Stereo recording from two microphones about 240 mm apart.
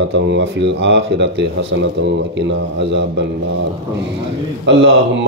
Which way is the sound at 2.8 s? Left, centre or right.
Right.